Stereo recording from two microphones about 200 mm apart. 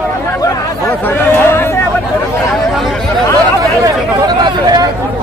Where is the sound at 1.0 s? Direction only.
10° left (ahead or behind).